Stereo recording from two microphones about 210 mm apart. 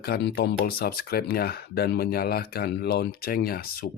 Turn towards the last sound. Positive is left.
turn(degrees=45)  # may be behind; listen again after turning